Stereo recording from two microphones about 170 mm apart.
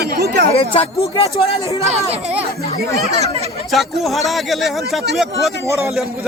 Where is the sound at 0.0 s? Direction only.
70° right (ahead or behind).